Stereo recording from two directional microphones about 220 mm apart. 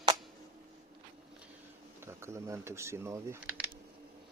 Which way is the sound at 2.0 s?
10° right (ahead or behind).